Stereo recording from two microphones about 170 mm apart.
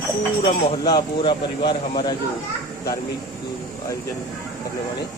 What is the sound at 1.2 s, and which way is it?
Speech, 30° left (ahead or behind).